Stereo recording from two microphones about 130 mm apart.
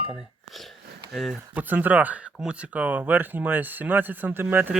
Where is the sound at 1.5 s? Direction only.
15° right (ahead or behind).